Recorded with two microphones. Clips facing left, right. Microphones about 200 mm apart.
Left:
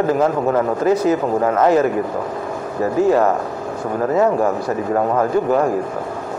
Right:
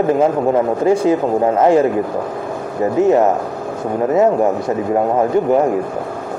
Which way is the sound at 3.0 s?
20° right (ahead or behind).